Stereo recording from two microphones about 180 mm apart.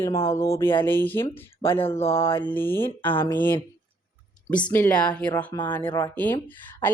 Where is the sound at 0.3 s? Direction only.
15° left (ahead or behind).